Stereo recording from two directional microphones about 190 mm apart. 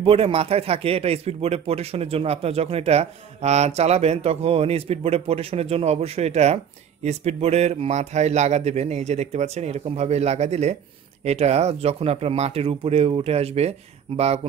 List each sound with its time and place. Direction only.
0.0 s speech: 30° right (ahead or behind)